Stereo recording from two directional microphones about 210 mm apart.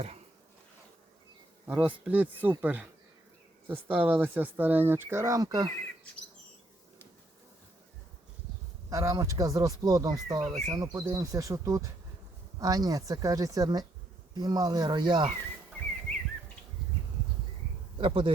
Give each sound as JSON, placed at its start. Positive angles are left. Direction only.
{"t": 1.6, "sound": "speech", "side_deg": -5}
{"t": 8.9, "sound": "speech", "side_deg": -15}
{"t": 17.9, "sound": "speech", "side_deg": -25}